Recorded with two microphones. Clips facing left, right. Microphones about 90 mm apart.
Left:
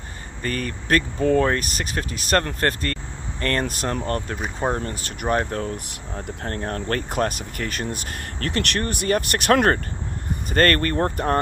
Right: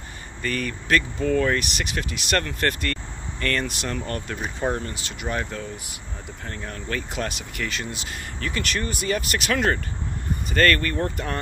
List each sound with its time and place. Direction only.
0.4 s speech: 35° left (ahead or behind)
4.9 s speech: 45° left (ahead or behind)
10.5 s speech: 40° left (ahead or behind)